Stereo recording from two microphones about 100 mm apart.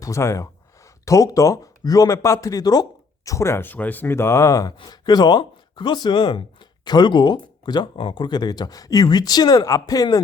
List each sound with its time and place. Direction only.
0.0 s speech: 30° left (ahead or behind)
4.8 s speech: 45° left (ahead or behind)